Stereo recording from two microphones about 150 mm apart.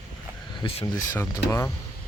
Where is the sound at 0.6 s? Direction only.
40° left (ahead or behind).